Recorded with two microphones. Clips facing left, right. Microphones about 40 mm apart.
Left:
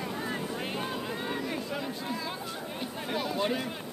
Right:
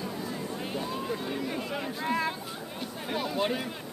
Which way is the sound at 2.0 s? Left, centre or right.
Right.